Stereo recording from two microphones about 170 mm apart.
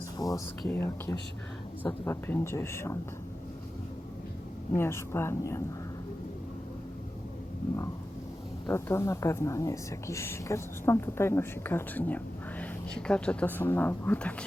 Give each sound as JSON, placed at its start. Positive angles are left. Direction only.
{"t": 0.2, "sound": "a sound", "side_deg": 20}
{"t": 0.7, "sound": "a woman's voice", "side_deg": 15}
{"t": 4.7, "sound": "a woman's voice", "side_deg": 15}
{"t": 8.6, "sound": "a woman's voice", "side_deg": 15}